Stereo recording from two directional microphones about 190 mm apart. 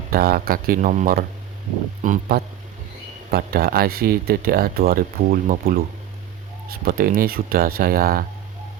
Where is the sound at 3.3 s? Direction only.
55° right (ahead or behind).